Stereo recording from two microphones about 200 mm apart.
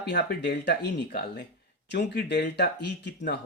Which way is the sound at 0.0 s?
55° left (ahead or behind).